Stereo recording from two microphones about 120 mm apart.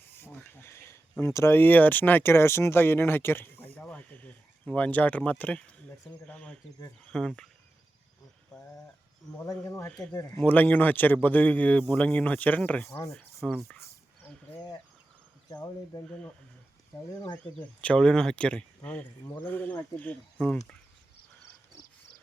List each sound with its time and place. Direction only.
0.1 s a sound: 20° left (ahead or behind)
1.2 s a man's voice: 25° left (ahead or behind); by 7.5 s 5° left (ahead or behind)
9.6 s speech: 20° left (ahead or behind)
10.3 s a man's voice: 15° left (ahead or behind)
13.3 s speech: centre (ahead or behind)
13.7 s a sound: 20° left (ahead or behind)
15.4 s speech: 30° left (ahead or behind)
16.0 s a man's voice: 10° left (ahead or behind)
17.6 s a man's voice: 10° left (ahead or behind)